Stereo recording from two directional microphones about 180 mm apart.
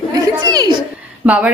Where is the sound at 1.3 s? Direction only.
5° right (ahead or behind).